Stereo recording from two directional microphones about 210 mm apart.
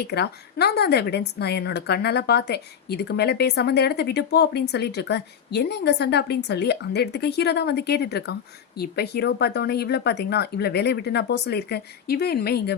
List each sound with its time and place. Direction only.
0.0 s speech: 50° left (ahead or behind)